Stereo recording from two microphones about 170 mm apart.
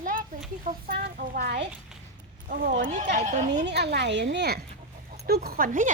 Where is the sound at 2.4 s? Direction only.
55° right (ahead or behind).